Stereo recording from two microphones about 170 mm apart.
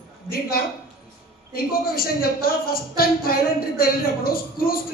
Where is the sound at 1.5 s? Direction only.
60° left (ahead or behind).